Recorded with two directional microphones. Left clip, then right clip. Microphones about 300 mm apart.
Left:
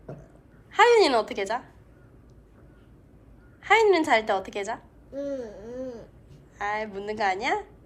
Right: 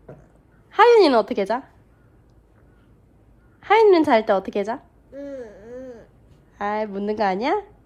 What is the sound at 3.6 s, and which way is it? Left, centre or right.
Speech, right.